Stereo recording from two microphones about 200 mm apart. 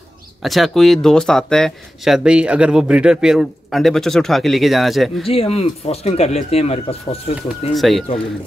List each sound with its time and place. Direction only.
0.4 s speech: centre (ahead or behind)
5.2 s speech: 30° left (ahead or behind)
7.7 s speech: centre (ahead or behind)